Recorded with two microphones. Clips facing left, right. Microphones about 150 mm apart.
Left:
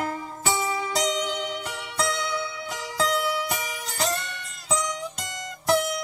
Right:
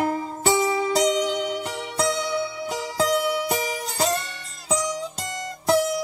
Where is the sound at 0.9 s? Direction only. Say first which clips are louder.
Right 4 dB; 45° right (ahead or behind).